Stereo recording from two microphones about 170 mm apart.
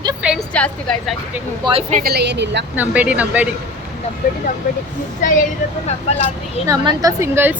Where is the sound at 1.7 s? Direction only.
25° right (ahead or behind).